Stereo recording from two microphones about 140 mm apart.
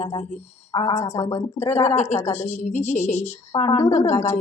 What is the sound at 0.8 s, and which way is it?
A woman's voice, 55° left (ahead or behind).